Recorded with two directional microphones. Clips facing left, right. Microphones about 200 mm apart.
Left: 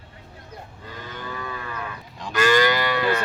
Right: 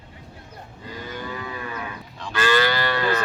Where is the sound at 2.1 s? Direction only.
15° left (ahead or behind).